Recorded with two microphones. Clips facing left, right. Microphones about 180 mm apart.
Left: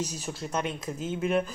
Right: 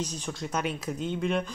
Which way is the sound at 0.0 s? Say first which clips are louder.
Even; 10° left (ahead or behind).